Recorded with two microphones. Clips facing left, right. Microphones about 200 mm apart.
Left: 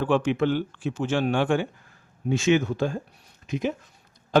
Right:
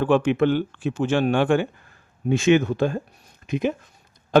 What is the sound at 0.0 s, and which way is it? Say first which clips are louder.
A man's voice: right 4 dB; 60° right (ahead or behind).